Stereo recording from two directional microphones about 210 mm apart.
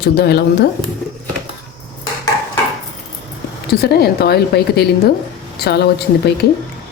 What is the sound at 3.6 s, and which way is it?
A woman's voice, 50° left (ahead or behind).